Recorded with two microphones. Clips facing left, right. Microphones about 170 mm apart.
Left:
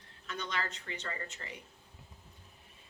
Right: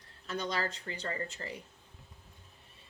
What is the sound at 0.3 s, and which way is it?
Speech, 35° right (ahead or behind).